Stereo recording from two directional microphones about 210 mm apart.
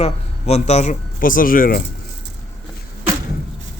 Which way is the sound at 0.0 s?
30° left (ahead or behind).